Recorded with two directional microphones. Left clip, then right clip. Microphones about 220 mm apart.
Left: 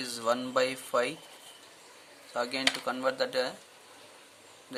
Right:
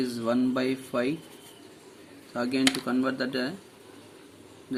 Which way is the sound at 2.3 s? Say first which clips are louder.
Right 3 dB; 15° left (ahead or behind).